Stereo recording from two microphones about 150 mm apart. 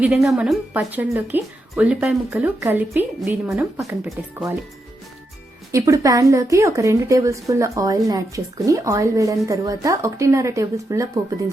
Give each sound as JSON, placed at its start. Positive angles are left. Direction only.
{"t": 0.0, "sound": "speech", "side_deg": 0}
{"t": 5.7, "sound": "a woman's voice", "side_deg": -20}